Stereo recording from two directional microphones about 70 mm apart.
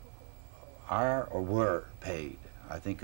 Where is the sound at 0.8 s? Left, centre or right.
Right.